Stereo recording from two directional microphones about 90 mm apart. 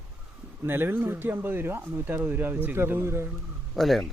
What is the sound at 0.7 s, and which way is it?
Speech, 25° right (ahead or behind).